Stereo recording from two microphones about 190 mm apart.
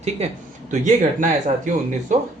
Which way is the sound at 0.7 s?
40° right (ahead or behind).